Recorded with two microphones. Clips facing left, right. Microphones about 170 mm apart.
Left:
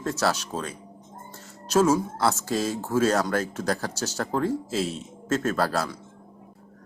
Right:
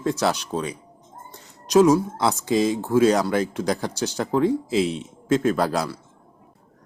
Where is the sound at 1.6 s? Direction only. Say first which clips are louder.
Right 5 dB; 15° right (ahead or behind).